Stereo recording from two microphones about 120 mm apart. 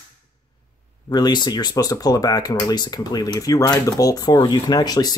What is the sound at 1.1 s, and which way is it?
Speech, 35° left (ahead or behind).